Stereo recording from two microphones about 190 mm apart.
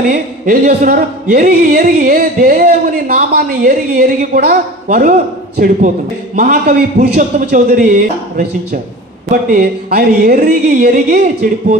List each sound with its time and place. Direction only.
0.1 s speech: 45° right (ahead or behind)